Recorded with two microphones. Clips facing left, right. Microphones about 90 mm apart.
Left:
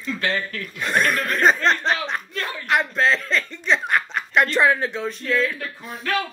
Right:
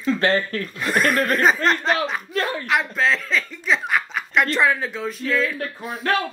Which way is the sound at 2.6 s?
Centre (ahead or behind).